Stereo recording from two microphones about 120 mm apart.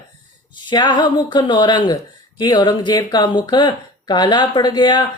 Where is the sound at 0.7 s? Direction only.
40° left (ahead or behind).